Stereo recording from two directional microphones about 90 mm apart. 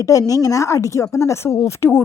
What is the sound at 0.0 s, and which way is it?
A woman's voice, 40° left (ahead or behind).